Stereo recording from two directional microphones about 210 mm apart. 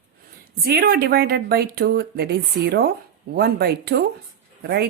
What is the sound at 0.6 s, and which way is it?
Speech, 45° right (ahead or behind).